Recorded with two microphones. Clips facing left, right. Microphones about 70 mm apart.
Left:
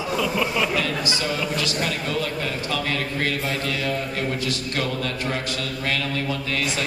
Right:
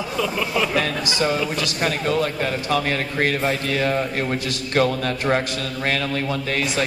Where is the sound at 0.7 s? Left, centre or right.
Right.